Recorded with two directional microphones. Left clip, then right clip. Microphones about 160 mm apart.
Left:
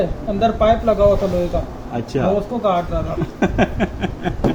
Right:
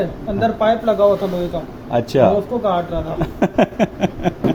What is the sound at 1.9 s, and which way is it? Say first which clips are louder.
Speech: right 8 dB; 55° right (ahead or behind).